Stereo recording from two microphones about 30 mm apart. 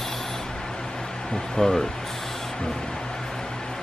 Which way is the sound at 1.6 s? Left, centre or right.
Centre.